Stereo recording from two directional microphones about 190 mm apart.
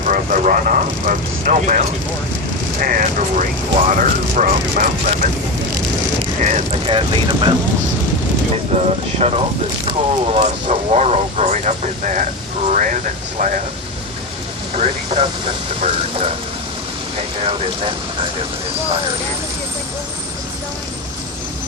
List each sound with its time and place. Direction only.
0.0 s speech: 45° right (ahead or behind)
6.8 s speech: 25° right (ahead or behind)
8.7 s speech: 35° right (ahead or behind)
14.8 s speech: 30° right (ahead or behind)